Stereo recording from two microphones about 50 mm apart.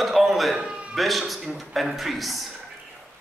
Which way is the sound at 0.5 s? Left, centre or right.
Right.